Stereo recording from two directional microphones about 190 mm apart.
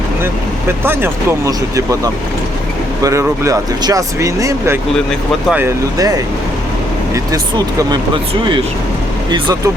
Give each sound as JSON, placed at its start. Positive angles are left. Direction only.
{"t": 0.9, "sound": "speech", "side_deg": -15}
{"t": 3.0, "sound": "speech", "side_deg": -15}
{"t": 7.9, "sound": "speech", "side_deg": -25}